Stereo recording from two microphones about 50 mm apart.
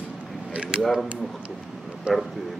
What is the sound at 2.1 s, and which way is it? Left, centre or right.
Speech, right.